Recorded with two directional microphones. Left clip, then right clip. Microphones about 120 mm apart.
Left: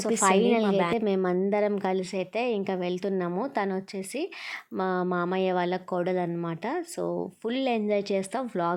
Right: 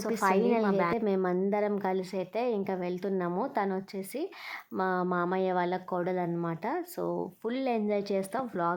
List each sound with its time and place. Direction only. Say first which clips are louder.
0.0 s a woman's voice: left 4 dB; 30° left (ahead or behind)